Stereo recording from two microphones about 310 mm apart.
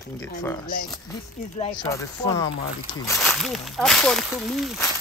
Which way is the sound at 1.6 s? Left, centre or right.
Centre.